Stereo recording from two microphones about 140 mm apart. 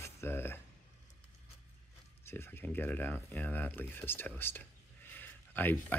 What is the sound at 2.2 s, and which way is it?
Speech, 15° left (ahead or behind).